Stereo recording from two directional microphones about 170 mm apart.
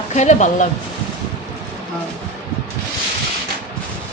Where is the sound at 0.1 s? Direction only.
45° left (ahead or behind).